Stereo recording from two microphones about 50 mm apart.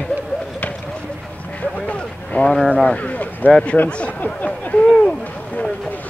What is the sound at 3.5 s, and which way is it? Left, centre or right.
Speech, centre.